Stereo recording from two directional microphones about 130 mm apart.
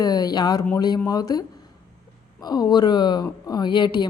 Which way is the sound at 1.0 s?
30° left (ahead or behind).